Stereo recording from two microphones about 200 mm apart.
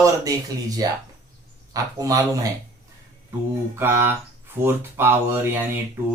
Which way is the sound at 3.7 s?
10° right (ahead or behind).